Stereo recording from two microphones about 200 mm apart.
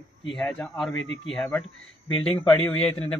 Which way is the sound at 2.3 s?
10° left (ahead or behind).